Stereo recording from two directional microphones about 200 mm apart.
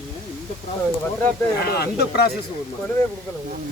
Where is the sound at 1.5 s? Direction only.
50° left (ahead or behind).